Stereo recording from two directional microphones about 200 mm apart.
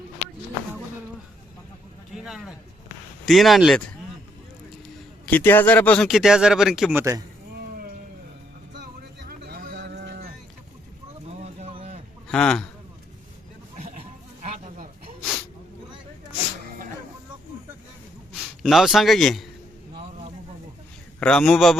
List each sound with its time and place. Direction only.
2.1 s a sound: 5° right (ahead or behind)
3.2 s speech: centre (ahead or behind)
5.3 s speech: 10° left (ahead or behind)
7.0 s speech: 15° right (ahead or behind)
8.8 s cattle: 50° right (ahead or behind)
11.3 s vehicle: 30° right (ahead or behind)
12.3 s speech: 5° left (ahead or behind)
14.4 s a sound: 35° right (ahead or behind)
18.3 s a man's voice: centre (ahead or behind)
21.2 s speech: 5° left (ahead or behind)